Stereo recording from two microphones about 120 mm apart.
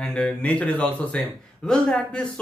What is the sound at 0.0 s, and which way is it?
Speech, 10° left (ahead or behind).